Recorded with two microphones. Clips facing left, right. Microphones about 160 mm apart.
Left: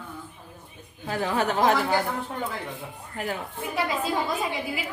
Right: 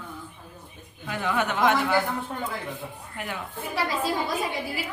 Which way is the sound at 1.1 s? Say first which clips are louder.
Left 1 dB; 35° left (ahead or behind).